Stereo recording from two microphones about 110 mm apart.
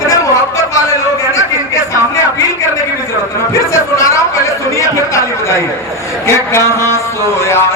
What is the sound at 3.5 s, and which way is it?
A man's voice, 25° left (ahead or behind).